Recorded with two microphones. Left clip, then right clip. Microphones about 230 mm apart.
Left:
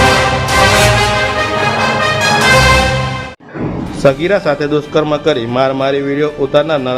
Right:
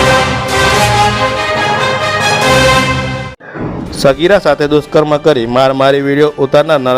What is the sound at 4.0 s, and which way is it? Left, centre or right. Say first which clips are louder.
A man's voice: right 3 dB; right.